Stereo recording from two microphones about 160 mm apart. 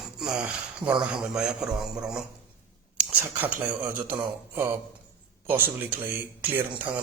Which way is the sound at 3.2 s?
10° right (ahead or behind).